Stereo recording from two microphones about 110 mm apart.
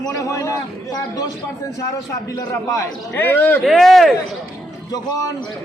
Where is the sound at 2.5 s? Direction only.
25° left (ahead or behind).